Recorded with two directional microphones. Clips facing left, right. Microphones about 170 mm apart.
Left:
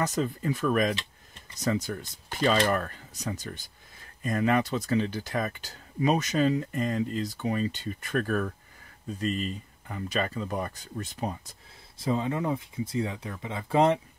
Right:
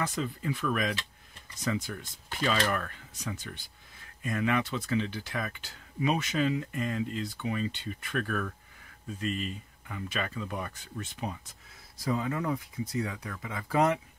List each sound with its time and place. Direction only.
0.0 s speech: 40° left (ahead or behind)
12.0 s speech: 25° left (ahead or behind)